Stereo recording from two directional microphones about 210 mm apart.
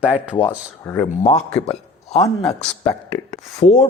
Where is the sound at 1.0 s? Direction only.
30° left (ahead or behind).